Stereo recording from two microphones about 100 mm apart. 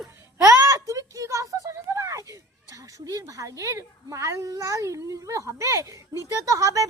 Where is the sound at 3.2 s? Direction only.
35° right (ahead or behind).